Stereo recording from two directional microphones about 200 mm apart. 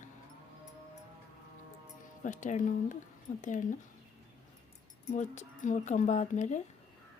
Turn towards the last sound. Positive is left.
turn(degrees=35)  # may be behind; listen again after turning